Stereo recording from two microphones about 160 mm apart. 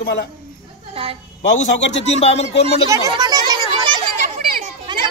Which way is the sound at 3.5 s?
25° right (ahead or behind).